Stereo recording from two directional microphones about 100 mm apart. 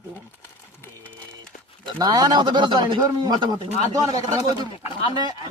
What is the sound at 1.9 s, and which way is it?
Speech, 40° right (ahead or behind).